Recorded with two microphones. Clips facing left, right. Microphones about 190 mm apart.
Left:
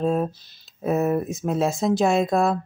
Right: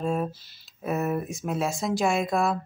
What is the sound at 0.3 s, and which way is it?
Speech, 15° left (ahead or behind).